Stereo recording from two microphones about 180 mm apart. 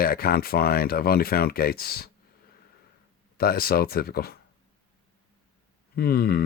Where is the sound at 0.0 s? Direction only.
55° left (ahead or behind).